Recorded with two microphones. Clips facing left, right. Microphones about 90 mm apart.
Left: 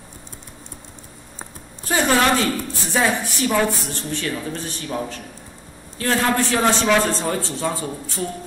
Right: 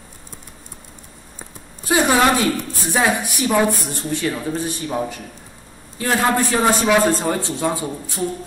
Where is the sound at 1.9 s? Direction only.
15° right (ahead or behind).